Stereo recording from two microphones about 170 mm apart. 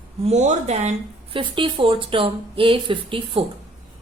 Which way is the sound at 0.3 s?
40° right (ahead or behind).